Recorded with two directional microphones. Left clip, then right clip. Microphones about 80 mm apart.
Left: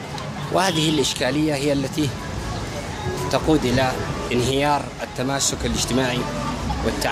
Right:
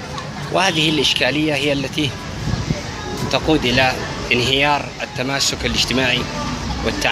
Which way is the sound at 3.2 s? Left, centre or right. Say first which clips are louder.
Right 3 dB; left.